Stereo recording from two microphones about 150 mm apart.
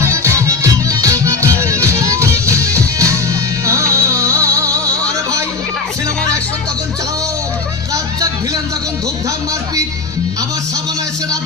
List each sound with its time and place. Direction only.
0.0 s music: 20° right (ahead or behind)